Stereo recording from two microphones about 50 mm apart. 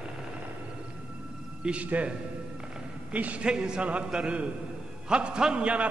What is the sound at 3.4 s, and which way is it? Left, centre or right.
A man's voice, centre.